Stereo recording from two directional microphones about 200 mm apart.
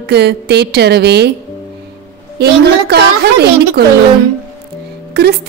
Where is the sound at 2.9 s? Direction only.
55° right (ahead or behind).